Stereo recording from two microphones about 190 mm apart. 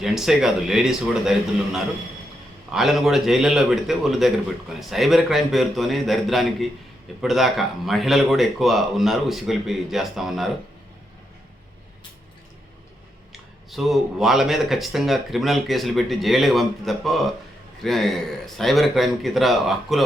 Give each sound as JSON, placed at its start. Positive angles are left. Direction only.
{"t": 0.0, "sound": "speech", "side_deg": 0}
{"t": 13.7, "sound": "speech", "side_deg": 0}